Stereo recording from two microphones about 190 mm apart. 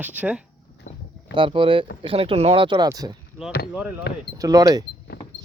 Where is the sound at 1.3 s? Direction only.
25° right (ahead or behind).